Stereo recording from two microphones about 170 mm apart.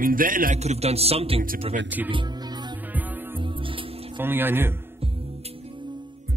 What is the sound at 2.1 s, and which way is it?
Music, 25° right (ahead or behind).